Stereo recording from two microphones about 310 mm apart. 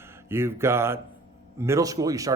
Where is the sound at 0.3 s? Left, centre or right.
Centre.